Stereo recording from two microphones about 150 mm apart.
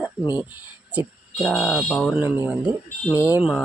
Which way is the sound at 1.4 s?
Centre (ahead or behind).